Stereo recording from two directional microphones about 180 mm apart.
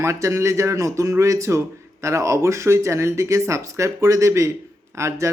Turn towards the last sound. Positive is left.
turn(degrees=-15)  # may be behind; listen again after turning